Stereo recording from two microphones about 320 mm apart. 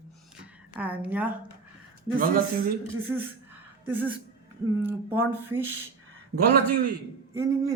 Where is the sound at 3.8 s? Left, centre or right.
Centre.